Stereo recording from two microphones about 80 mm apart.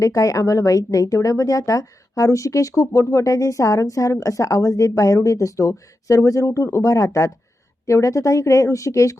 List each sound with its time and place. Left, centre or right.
0.0 s speech: left